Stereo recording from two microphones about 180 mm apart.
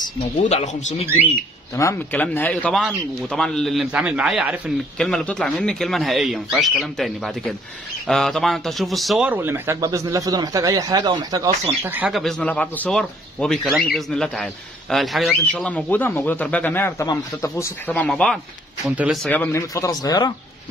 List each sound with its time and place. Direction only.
0.4 s speech: 40° left (ahead or behind)
1.8 s a man's voice: 15° left (ahead or behind); by 11.5 s 20° right (ahead or behind)
11.8 s a man's voice: 10° right (ahead or behind)
19.2 s speech: 10° left (ahead or behind)